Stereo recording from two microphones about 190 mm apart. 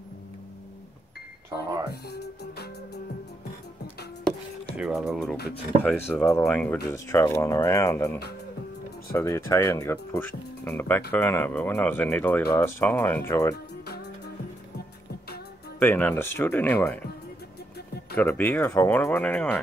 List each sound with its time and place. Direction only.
1.9 s speech: 55° left (ahead or behind)
4.7 s speech: centre (ahead or behind)
15.8 s speech: 10° left (ahead or behind)
18.1 s speech: 10° left (ahead or behind)